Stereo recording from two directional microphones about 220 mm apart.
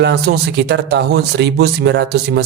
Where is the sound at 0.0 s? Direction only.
50° right (ahead or behind).